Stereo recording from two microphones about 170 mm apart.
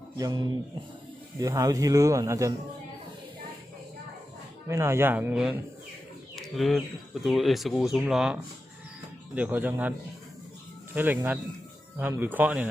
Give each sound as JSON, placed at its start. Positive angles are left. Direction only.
{"t": 0.2, "sound": "speech", "side_deg": -20}
{"t": 4.7, "sound": "speech", "side_deg": -15}
{"t": 6.6, "sound": "speech", "side_deg": 0}
{"t": 10.9, "sound": "speech", "side_deg": -10}